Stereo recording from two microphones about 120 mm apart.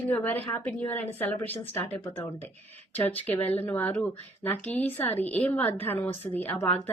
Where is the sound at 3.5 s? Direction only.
15° left (ahead or behind).